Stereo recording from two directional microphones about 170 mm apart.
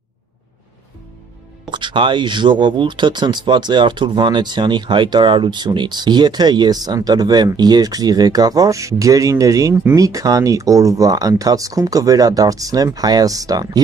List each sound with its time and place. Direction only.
1.7 s speech: 30° right (ahead or behind)